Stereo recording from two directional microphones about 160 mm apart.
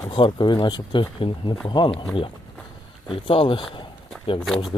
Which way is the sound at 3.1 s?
35° left (ahead or behind).